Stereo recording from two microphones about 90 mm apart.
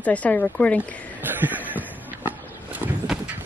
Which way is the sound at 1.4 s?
20° right (ahead or behind).